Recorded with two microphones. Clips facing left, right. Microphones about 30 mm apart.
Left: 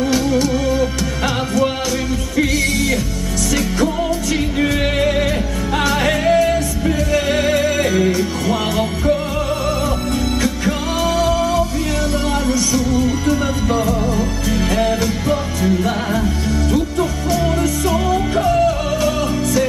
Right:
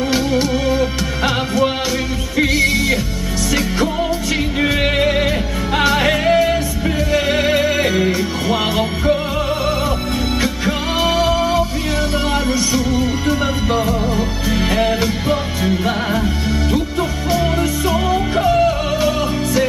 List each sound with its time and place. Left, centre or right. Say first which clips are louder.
0.1 s music: even; right
4.6 s music: right 2 dB; centre
10.4 s music: even; right
17.3 s music: right 2 dB; centre